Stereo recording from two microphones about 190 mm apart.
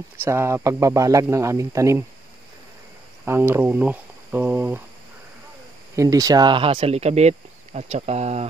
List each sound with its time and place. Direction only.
0.2 s speech: 15° right (ahead or behind)
3.3 s speech: 10° right (ahead or behind)
5.9 s speech: 20° right (ahead or behind); by 8.5 s 35° right (ahead or behind)